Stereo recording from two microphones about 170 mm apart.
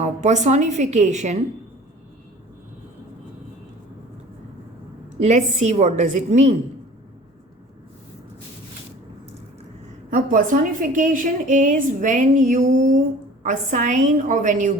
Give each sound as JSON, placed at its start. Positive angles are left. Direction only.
{"t": 0.0, "sound": "a woman's voice", "side_deg": -45}
{"t": 5.2, "sound": "a woman's voice", "side_deg": -40}
{"t": 10.1, "sound": "a woman's voice", "side_deg": -50}